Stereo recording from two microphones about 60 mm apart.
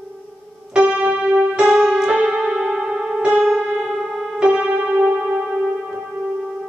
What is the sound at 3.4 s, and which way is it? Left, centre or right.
Piano, centre.